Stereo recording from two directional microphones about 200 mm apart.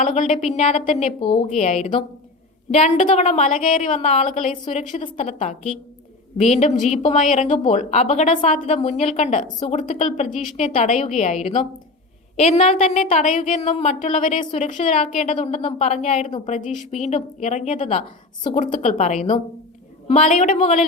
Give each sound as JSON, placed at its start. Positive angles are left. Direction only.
{"t": 0.0, "sound": "a woman's voice", "side_deg": 35}